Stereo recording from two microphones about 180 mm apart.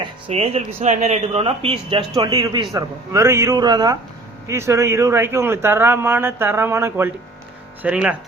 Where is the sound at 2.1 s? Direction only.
20° right (ahead or behind).